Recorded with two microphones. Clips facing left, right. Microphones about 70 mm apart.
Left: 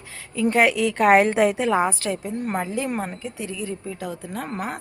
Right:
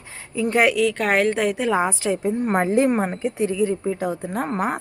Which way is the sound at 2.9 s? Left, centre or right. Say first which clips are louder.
Right 6 dB; right.